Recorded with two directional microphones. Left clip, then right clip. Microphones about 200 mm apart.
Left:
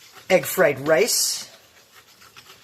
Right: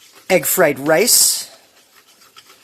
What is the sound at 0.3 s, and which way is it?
Speech, 50° right (ahead or behind).